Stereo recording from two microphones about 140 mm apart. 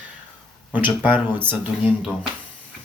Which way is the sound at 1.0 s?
10° right (ahead or behind).